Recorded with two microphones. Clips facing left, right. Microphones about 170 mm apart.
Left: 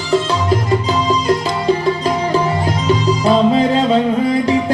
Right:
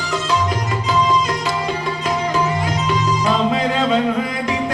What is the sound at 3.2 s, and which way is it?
Music, 30° left (ahead or behind).